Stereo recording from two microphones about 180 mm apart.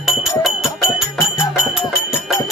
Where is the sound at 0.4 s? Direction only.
Centre (ahead or behind).